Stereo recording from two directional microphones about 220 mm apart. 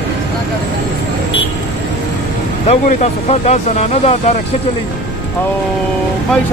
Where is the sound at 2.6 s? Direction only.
30° left (ahead or behind).